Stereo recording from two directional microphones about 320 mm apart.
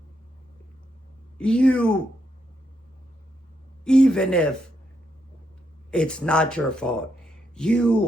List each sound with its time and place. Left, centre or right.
1.4 s speech: centre
3.8 s a sound: centre
5.9 s speech: centre